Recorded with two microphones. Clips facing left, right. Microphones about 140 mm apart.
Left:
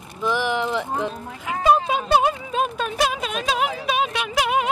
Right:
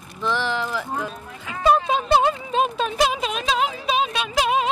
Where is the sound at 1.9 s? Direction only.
10° left (ahead or behind).